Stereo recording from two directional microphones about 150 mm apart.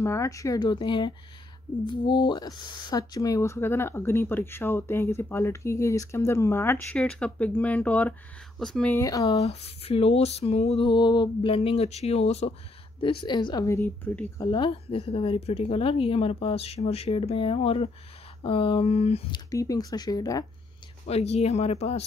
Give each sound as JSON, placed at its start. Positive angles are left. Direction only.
{"t": 0.0, "sound": "a woman's voice", "side_deg": 20}
{"t": 8.9, "sound": "a woman's voice", "side_deg": 20}
{"t": 9.4, "sound": "a sound", "side_deg": 45}
{"t": 13.0, "sound": "a woman's voice", "side_deg": 35}
{"t": 14.4, "sound": "a woman's voice", "side_deg": 30}
{"t": 19.3, "sound": "a woman's voice", "side_deg": 25}
{"t": 21.1, "sound": "a sound", "side_deg": 45}